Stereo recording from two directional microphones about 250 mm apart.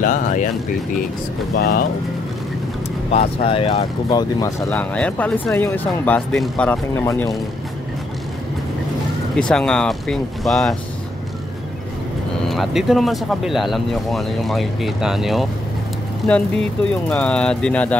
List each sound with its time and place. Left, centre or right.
0.0 s speech: left
3.1 s speech: left
9.3 s speech: centre
12.4 s speech: centre